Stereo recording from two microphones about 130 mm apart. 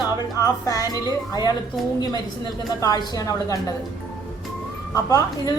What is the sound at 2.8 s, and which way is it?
Speech, 30° left (ahead or behind).